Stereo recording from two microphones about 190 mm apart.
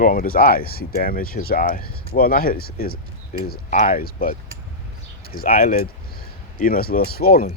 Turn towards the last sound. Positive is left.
turn(degrees=55)  # may be behind; listen again after turning